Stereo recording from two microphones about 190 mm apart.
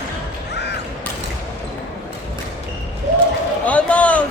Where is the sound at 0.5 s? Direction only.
60° left (ahead or behind).